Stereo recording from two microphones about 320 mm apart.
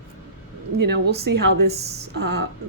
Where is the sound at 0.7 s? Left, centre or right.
Right.